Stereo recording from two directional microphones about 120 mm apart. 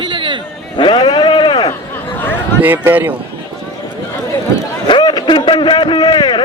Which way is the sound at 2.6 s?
15° right (ahead or behind).